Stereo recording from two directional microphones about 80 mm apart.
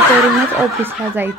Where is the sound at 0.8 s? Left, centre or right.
Right.